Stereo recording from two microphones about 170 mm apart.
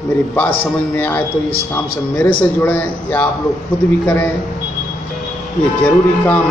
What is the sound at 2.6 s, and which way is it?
Speech, 10° left (ahead or behind).